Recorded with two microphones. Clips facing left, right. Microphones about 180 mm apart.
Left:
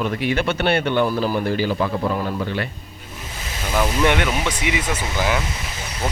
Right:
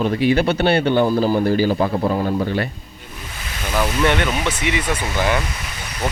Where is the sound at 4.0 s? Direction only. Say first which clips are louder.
Right 1 dB; 10° left (ahead or behind).